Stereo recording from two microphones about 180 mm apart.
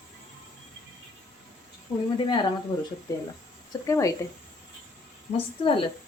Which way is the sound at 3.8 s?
20° left (ahead or behind).